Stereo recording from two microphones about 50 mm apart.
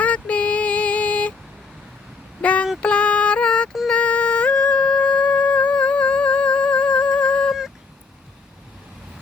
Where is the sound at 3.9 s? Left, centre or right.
Left.